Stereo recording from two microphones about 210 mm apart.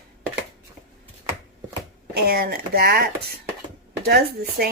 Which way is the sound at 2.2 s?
50° right (ahead or behind).